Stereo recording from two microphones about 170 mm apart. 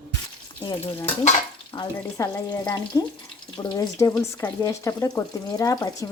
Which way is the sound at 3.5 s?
20° left (ahead or behind).